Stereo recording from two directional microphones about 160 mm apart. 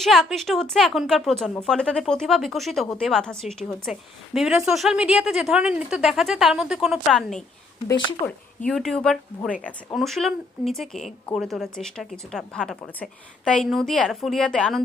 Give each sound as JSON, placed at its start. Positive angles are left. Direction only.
{"t": 0.0, "sound": "a woman's voice", "side_deg": 0}
{"t": 7.9, "sound": "speech", "side_deg": 20}
{"t": 8.6, "sound": "a woman's voice", "side_deg": 0}